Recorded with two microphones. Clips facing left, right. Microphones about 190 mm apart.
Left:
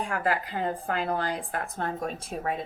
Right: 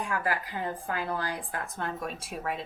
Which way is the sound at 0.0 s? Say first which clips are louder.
Left 3 dB; 25° left (ahead or behind).